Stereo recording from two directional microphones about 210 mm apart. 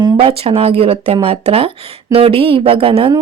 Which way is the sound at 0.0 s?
25° right (ahead or behind).